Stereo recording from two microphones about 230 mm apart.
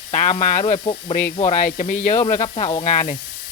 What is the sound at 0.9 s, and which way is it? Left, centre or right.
Speech, centre.